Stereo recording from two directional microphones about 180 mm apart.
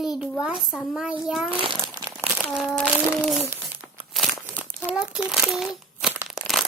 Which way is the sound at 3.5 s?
10° right (ahead or behind).